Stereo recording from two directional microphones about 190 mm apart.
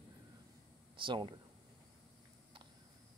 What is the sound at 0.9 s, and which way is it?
Speech, 25° right (ahead or behind).